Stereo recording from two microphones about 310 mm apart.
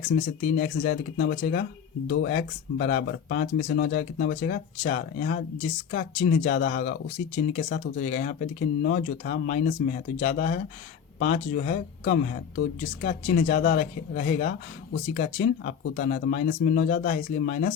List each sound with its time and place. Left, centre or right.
0.5 s speech: left